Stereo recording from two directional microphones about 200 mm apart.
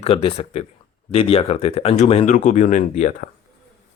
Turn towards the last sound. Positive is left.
turn(degrees=40)  # may be behind; listen again after turning